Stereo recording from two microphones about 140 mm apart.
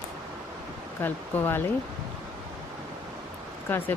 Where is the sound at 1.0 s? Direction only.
15° left (ahead or behind).